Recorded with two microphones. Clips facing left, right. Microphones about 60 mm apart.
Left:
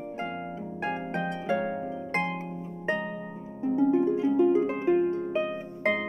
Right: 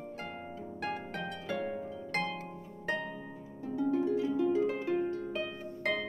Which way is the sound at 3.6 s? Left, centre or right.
Left.